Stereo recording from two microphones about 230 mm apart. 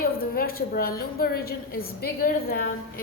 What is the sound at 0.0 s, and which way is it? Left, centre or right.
A woman's voice, left.